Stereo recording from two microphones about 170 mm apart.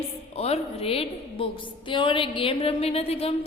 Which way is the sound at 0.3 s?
40° left (ahead or behind).